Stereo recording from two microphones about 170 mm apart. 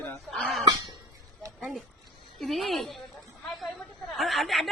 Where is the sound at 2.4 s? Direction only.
Centre (ahead or behind).